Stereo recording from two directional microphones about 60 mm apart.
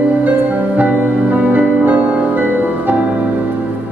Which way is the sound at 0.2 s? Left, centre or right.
Right.